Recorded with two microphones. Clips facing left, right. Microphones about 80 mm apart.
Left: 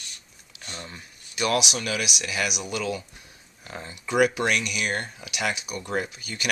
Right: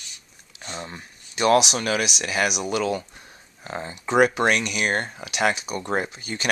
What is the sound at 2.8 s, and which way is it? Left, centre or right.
Speech, right.